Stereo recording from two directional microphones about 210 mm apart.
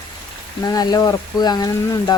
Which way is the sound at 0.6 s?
20° left (ahead or behind).